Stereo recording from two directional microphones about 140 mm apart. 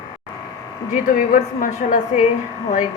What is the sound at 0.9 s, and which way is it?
A woman's voice, 70° left (ahead or behind).